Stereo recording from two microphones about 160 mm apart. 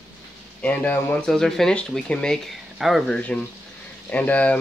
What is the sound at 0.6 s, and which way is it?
Speech, 10° left (ahead or behind).